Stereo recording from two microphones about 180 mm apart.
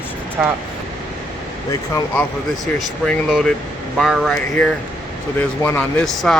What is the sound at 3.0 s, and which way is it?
Speech, centre (ahead or behind).